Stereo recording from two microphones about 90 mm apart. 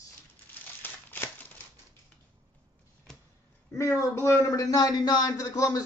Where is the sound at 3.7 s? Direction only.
35° left (ahead or behind).